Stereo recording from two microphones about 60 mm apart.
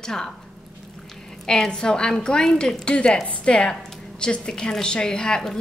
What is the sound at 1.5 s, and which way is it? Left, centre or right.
A woman's voice, centre.